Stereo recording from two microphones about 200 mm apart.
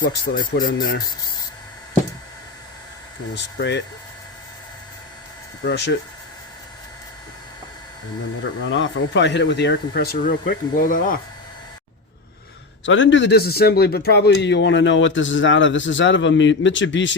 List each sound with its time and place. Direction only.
0.0 s speech: 45° left (ahead or behind)
3.3 s speech: 60° left (ahead or behind)
5.6 s speech: 60° left (ahead or behind)
8.6 s speech: 65° left (ahead or behind); by 11.2 s 45° left (ahead or behind)
12.8 s a man's voice: 70° left (ahead or behind)